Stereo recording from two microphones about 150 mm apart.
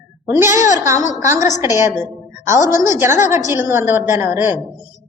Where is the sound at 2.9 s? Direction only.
20° right (ahead or behind).